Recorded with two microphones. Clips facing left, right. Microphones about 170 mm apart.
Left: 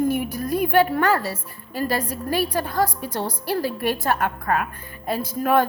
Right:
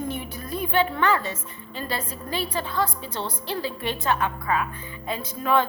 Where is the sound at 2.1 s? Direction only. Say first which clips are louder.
Left 6 dB; 10° left (ahead or behind).